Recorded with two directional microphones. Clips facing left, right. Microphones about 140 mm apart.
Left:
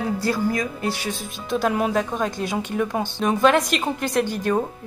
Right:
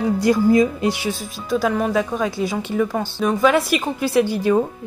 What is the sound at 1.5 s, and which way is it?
A woman's voice, 5° left (ahead or behind).